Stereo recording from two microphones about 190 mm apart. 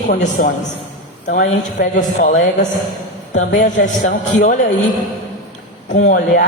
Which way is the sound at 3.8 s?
40° left (ahead or behind).